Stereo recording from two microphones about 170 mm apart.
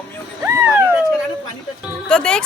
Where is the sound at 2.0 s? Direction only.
5° left (ahead or behind).